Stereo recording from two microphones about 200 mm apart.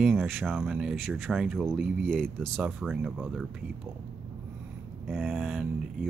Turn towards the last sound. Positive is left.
turn(degrees=-5)  # may be behind; listen again after turning